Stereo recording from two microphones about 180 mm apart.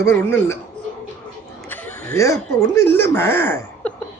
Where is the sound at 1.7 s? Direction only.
10° left (ahead or behind).